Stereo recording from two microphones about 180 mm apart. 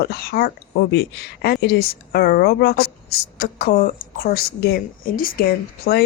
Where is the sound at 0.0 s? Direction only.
60° left (ahead or behind).